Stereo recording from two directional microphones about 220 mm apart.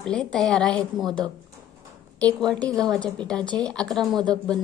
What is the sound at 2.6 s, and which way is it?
A woman's voice, centre (ahead or behind).